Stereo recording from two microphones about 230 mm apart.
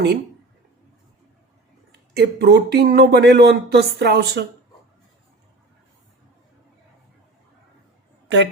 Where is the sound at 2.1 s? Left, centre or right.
Right.